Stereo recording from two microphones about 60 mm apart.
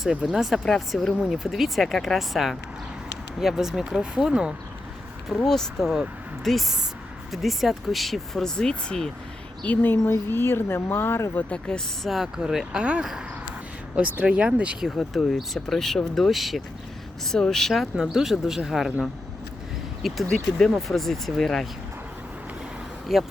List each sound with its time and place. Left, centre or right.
0.3 s speech: centre
5.3 s speech: centre
9.6 s speech: left
11.3 s speech: centre
12.0 s speech: centre
14.8 s speech: centre
20.0 s speech: centre
23.1 s speech: centre